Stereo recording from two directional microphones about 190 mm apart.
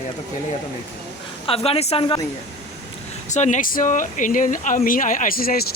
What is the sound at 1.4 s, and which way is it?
Speech, 30° left (ahead or behind).